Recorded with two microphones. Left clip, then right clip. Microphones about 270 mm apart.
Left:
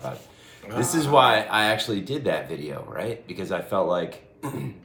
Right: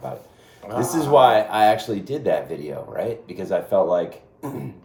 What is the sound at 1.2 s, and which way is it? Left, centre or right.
Speech, centre.